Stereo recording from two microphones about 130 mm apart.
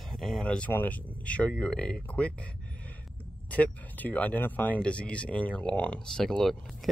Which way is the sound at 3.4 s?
10° left (ahead or behind).